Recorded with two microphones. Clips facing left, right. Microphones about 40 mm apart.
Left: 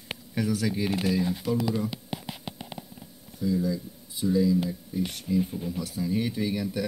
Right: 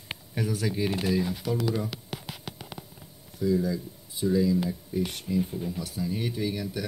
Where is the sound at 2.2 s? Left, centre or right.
Centre.